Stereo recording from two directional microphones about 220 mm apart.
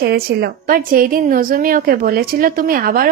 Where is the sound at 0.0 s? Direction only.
45° right (ahead or behind).